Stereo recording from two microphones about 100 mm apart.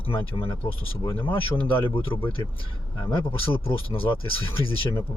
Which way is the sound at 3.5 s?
65° left (ahead or behind).